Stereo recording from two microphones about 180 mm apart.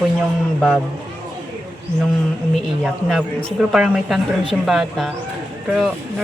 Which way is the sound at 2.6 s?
Centre (ahead or behind).